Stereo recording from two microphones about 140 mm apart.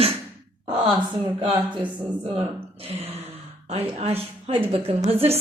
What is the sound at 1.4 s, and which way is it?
Speech, 45° right (ahead or behind).